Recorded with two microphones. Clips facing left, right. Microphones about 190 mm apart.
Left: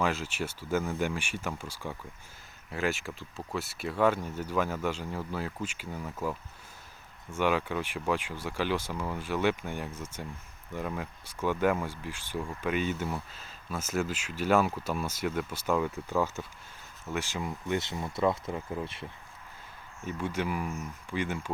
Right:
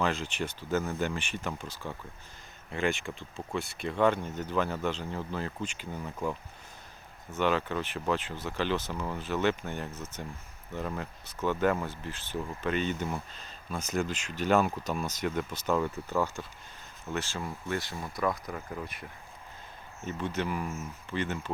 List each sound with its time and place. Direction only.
0.0 s speech: 5° left (ahead or behind); by 19.0 s 25° left (ahead or behind)
20.1 s speech: 10° left (ahead or behind)